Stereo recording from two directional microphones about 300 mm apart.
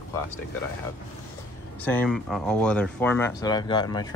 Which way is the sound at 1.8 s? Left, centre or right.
Centre.